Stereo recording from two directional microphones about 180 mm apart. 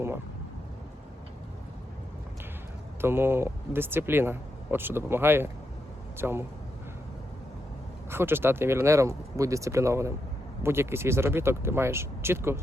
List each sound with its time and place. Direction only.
3.0 s speech: 15° right (ahead or behind)
8.1 s speech: 10° right (ahead or behind)